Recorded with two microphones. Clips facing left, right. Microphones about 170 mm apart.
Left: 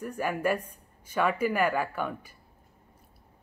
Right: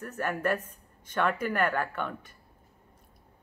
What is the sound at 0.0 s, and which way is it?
Speech, 10° left (ahead or behind).